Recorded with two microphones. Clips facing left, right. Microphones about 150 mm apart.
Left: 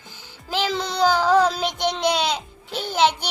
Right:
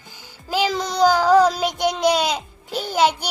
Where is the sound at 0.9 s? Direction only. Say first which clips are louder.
Right 3 dB; 10° right (ahead or behind).